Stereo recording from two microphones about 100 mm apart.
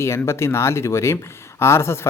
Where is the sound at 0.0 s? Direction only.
25° left (ahead or behind).